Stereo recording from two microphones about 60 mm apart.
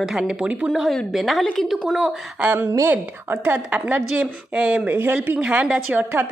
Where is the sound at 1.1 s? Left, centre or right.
Centre.